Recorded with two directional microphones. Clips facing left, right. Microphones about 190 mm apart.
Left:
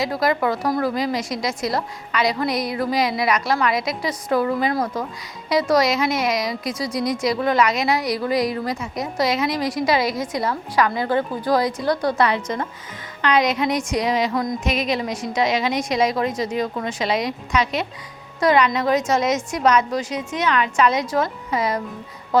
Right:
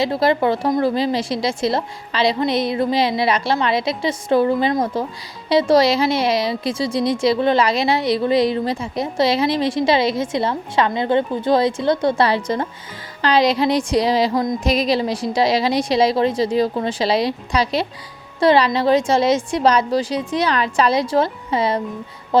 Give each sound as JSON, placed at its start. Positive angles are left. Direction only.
{"t": 0.0, "sound": "a woman's voice", "side_deg": -30}